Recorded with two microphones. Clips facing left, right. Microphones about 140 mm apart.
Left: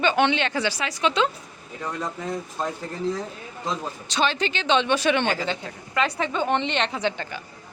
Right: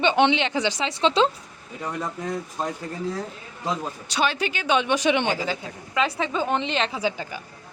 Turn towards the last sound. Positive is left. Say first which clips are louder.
# even
turn(degrees=-10)  # may be behind; listen again after turning